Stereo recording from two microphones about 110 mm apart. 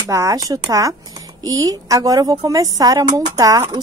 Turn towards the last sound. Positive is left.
turn(degrees=-35)  # may be behind; listen again after turning